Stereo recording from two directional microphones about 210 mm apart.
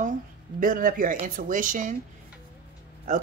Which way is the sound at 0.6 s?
40° right (ahead or behind).